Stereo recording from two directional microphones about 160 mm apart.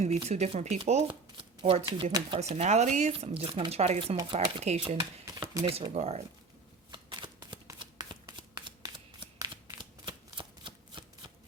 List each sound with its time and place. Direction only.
0.0 s speech: 40° right (ahead or behind)
6.9 s shuffling cards: 30° right (ahead or behind)